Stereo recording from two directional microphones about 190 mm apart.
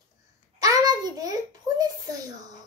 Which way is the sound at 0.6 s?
20° right (ahead or behind).